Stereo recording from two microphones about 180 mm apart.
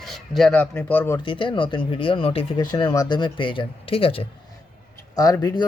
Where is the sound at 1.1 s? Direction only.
30° left (ahead or behind).